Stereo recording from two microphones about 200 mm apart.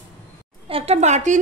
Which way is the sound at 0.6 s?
30° right (ahead or behind).